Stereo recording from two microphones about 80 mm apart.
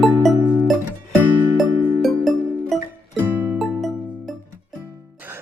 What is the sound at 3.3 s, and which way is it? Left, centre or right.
Music, right.